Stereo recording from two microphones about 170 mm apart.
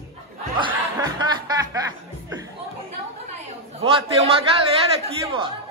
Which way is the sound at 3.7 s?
35° right (ahead or behind).